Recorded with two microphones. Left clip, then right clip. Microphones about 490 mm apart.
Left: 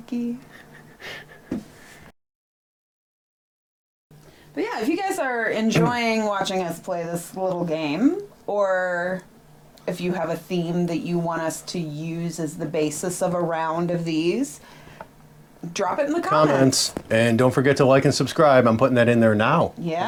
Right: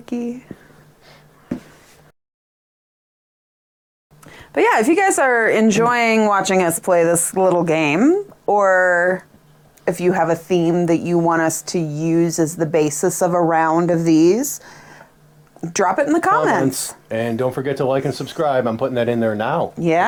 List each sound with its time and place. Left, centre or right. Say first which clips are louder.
0.1 s a woman's voice: right 4 dB; right
4.5 s a woman's voice: right 13 dB; right
4.9 s a woman's voice: right 9 dB; right
16.6 s speech: left 2 dB; left
19.8 s a woman's voice: right 10 dB; right